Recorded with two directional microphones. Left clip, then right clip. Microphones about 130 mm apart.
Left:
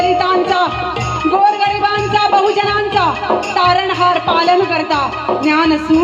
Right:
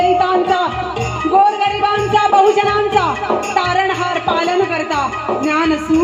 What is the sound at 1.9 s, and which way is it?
Music, 45° left (ahead or behind).